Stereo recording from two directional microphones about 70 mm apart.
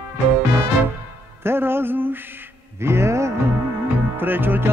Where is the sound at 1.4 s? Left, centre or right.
Right.